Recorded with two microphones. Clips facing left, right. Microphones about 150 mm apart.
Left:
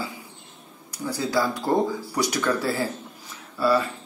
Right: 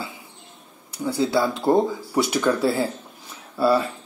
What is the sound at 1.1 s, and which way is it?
A man's voice, 25° right (ahead or behind).